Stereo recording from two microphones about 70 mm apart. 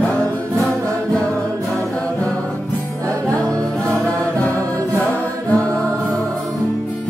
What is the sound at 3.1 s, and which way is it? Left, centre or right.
Music, right.